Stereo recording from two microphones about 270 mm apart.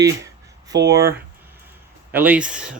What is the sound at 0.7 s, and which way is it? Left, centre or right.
Speech, right.